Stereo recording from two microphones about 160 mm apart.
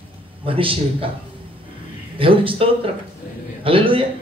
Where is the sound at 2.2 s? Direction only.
35° right (ahead or behind).